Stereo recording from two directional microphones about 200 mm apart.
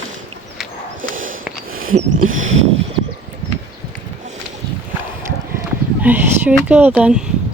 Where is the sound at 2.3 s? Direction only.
35° right (ahead or behind).